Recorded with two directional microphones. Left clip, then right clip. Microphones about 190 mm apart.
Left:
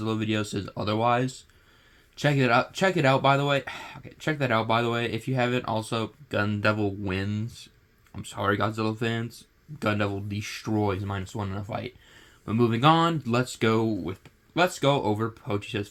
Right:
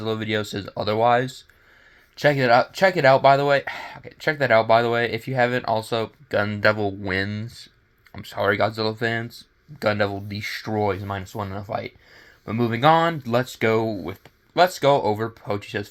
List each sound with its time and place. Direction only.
0.0 s speech: 20° right (ahead or behind)